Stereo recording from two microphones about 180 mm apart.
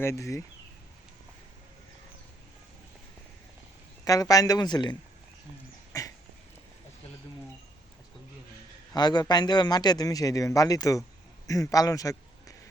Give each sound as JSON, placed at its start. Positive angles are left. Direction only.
{"t": 0.0, "sound": "speech", "side_deg": 15}
{"t": 4.0, "sound": "a man's voice", "side_deg": 20}
{"t": 5.9, "sound": "dog", "side_deg": 20}
{"t": 8.9, "sound": "a man's voice", "side_deg": 20}